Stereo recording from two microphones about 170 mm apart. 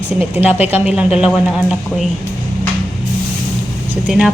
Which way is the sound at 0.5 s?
40° left (ahead or behind).